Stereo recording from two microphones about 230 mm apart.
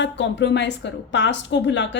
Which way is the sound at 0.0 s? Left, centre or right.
Left.